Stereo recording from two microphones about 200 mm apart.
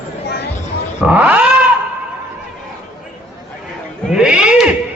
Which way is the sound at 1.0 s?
5° right (ahead or behind).